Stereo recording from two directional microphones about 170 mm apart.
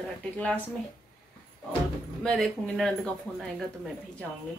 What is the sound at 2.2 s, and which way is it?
Speech, centre (ahead or behind).